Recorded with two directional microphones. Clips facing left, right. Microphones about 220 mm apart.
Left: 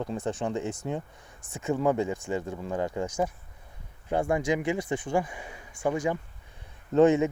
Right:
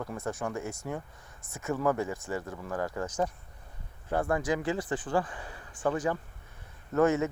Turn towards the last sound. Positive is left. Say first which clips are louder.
# left 5 dB
turn(degrees=15)  # may be behind; listen again after turning